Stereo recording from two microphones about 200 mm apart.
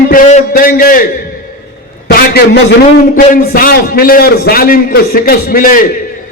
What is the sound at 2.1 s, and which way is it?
A man's voice, 50° left (ahead or behind).